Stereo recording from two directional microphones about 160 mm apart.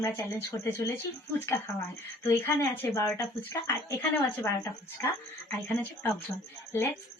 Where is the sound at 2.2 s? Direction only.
15° left (ahead or behind).